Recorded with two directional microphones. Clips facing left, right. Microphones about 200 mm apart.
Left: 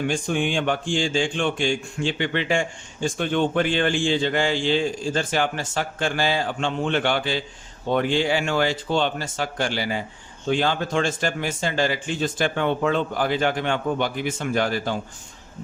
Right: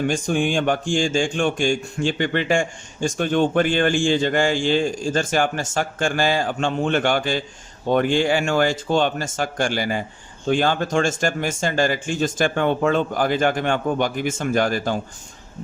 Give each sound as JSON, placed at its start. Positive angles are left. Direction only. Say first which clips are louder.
{"t": 0.1, "sound": "speech", "louder": "right 3 dB", "side_deg": -40}